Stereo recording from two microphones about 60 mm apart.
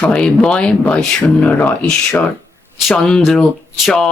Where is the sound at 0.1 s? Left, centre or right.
Centre.